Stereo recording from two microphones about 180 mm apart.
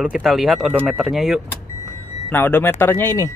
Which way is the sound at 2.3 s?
10° left (ahead or behind).